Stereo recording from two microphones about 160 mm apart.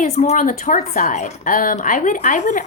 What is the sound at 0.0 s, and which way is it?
A woman's voice, 50° left (ahead or behind).